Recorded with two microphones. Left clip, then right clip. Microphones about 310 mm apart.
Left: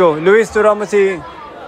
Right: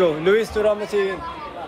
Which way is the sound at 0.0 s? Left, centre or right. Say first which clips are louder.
Left 7 dB; centre.